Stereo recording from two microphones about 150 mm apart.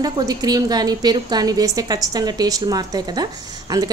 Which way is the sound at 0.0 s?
25° right (ahead or behind).